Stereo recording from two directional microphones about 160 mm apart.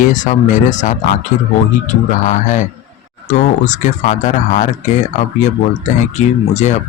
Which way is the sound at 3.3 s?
50° left (ahead or behind).